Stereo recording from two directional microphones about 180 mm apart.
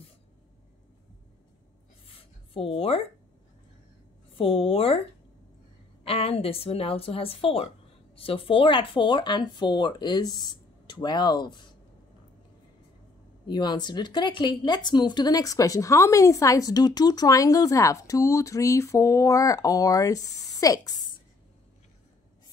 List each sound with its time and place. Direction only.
2.0 s a sound: 30° left (ahead or behind)
4.4 s a woman's voice: 30° left (ahead or behind)
6.0 s a woman's voice: 30° left (ahead or behind)
13.5 s speech: 25° left (ahead or behind)